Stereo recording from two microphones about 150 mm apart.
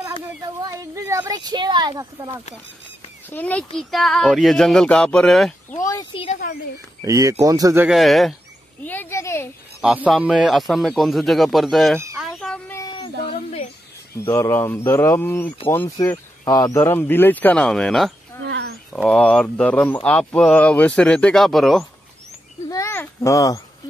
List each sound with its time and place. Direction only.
0.6 s speech: 25° right (ahead or behind)
3.3 s speech: 10° left (ahead or behind)
5.7 s a sound: 20° left (ahead or behind)
6.4 s speech: 60° left (ahead or behind)
7.0 s speech: 20° right (ahead or behind)
7.9 s speech: centre (ahead or behind)
8.8 s speech: 15° left (ahead or behind)
9.8 s speech: 10° right (ahead or behind)
12.2 s a sound: 5° left (ahead or behind)
12.7 s cat: 25° left (ahead or behind)
14.3 s speech: 20° left (ahead or behind)
16.4 s speech: 25° left (ahead or behind); by 21.8 s centre (ahead or behind)
22.7 s a sound: 20° left (ahead or behind)